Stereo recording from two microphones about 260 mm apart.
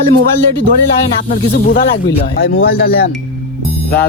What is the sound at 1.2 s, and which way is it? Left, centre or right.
Speech, left.